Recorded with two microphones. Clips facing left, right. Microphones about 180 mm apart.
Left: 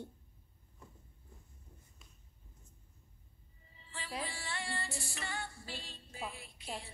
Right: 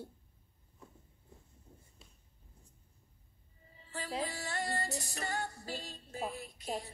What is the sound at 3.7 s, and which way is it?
Music, 45° right (ahead or behind).